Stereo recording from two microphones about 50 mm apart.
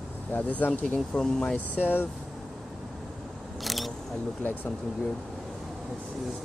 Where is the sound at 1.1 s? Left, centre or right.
Centre.